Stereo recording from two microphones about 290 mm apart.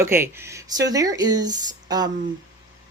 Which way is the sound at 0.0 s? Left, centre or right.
Centre.